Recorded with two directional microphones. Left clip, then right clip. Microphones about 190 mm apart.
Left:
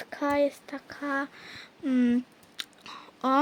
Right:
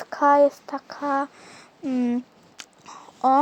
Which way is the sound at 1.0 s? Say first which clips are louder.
Right 6 dB; centre (ahead or behind).